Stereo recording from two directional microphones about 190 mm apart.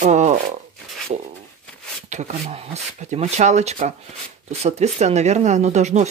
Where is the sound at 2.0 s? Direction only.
35° right (ahead or behind).